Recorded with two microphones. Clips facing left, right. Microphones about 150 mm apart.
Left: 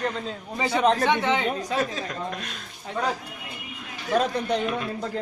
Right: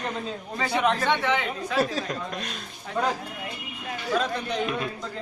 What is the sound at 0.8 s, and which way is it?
Speech, 40° left (ahead or behind).